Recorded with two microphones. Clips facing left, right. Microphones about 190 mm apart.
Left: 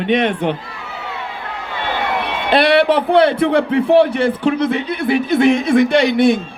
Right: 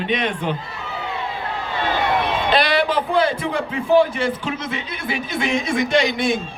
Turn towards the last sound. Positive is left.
turn(degrees=60)  # may be behind; listen again after turning